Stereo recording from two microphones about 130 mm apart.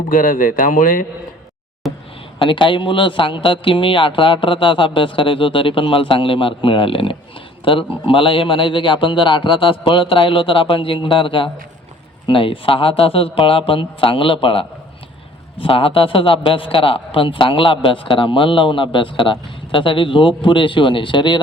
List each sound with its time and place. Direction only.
0.1 s speech: 90° left
1.8 s a sound: centre (ahead or behind)
2.4 s a man's voice: 40° left (ahead or behind)